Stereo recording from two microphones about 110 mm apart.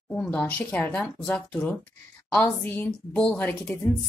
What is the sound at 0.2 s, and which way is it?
Speech, 10° left (ahead or behind).